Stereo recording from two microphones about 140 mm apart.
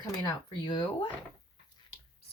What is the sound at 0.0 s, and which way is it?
Speech, 30° left (ahead or behind).